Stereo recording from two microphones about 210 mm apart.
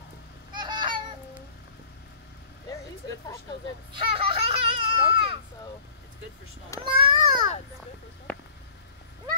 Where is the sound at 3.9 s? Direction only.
25° right (ahead or behind).